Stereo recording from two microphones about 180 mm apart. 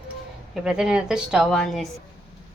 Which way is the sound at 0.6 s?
5° right (ahead or behind).